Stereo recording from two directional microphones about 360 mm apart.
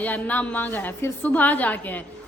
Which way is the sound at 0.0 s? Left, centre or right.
Centre.